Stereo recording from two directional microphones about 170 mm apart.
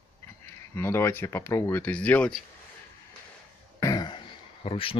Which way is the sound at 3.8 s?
25° left (ahead or behind).